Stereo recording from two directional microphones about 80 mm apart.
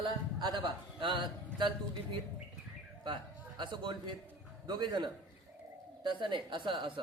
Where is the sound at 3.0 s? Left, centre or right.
Right.